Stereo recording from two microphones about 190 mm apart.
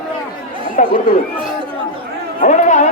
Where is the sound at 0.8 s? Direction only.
45° left (ahead or behind).